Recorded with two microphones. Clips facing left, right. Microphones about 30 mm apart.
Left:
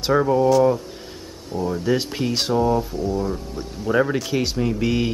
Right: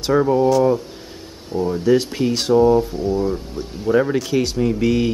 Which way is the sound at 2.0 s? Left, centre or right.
Centre.